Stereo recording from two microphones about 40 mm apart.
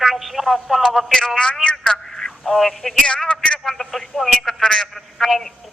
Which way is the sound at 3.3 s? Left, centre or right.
Left.